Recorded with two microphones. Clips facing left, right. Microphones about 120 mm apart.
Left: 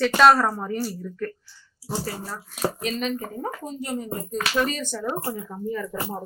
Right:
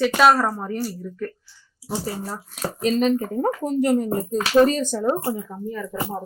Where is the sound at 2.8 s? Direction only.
40° right (ahead or behind).